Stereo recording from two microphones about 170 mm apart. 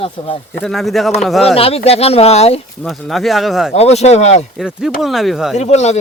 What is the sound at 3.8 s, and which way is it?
Speech, 40° left (ahead or behind).